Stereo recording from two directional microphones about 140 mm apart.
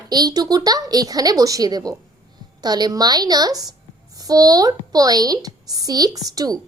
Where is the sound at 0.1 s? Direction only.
30° right (ahead or behind).